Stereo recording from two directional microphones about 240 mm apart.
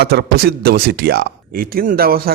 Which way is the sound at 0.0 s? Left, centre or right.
Right.